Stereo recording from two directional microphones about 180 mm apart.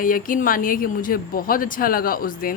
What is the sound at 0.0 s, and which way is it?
Speech, 50° left (ahead or behind).